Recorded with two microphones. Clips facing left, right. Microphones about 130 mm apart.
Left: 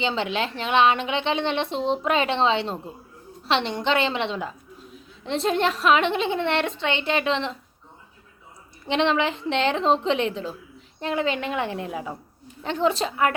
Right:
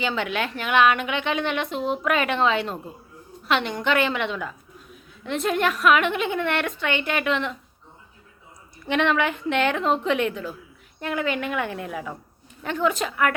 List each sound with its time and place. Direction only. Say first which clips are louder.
0.0 s a woman's voice: left 1 dB; 25° left (ahead or behind)
8.9 s a woman's voice: even; 25° left (ahead or behind)